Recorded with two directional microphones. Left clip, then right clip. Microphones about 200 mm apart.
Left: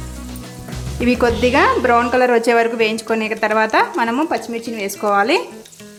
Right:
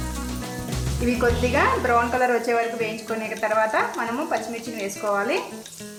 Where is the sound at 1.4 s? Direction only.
55° left (ahead or behind).